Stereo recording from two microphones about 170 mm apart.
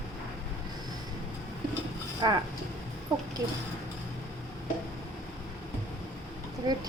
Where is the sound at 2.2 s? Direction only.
25° right (ahead or behind).